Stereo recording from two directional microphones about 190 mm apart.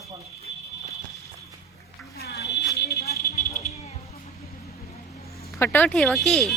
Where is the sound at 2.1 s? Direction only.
55° left (ahead or behind).